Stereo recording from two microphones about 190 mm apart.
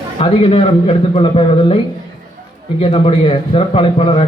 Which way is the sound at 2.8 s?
30° left (ahead or behind).